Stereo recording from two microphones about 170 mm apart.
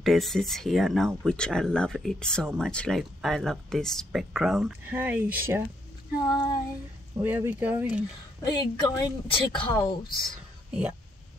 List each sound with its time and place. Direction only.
0.0 s speech: centre (ahead or behind)
6.2 s a woman's voice: 20° left (ahead or behind)
7.2 s speech: 10° right (ahead or behind)
8.4 s a woman's voice: 25° left (ahead or behind)
10.7 s speech: 5° right (ahead or behind)